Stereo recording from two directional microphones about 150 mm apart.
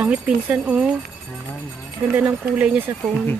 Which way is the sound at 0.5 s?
5° right (ahead or behind).